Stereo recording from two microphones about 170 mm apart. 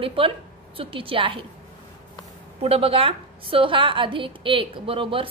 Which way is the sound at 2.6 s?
35° right (ahead or behind).